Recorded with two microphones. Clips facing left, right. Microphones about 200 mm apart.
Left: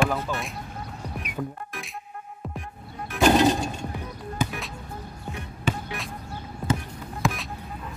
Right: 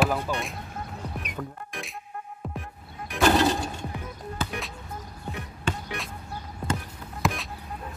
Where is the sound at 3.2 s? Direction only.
15° left (ahead or behind).